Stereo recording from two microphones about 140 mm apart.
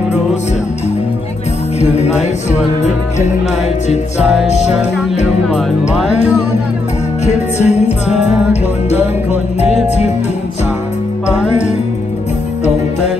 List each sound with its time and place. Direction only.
1.8 s music: 50° left (ahead or behind)
4.2 s music: 5° right (ahead or behind)
5.2 s speech: 5° right (ahead or behind)
7.2 s music: 50° left (ahead or behind)
8.9 s music: 50° left (ahead or behind)